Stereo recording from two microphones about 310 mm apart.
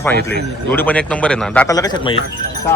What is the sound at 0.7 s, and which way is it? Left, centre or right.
Speech, centre.